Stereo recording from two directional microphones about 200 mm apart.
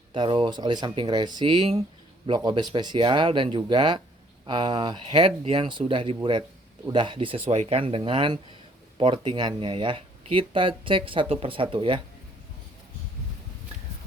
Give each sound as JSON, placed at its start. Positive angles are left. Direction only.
{"t": 0.1, "sound": "speech", "side_deg": -25}